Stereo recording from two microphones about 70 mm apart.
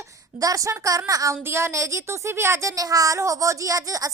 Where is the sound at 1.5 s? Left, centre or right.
Right.